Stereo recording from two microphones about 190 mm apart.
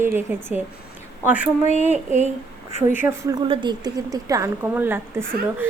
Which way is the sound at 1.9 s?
40° right (ahead or behind).